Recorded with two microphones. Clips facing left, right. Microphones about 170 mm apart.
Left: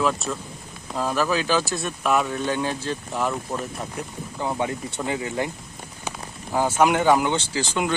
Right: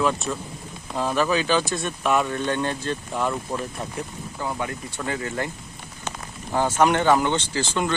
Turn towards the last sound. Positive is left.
turn(degrees=10)  # may be behind; listen again after turning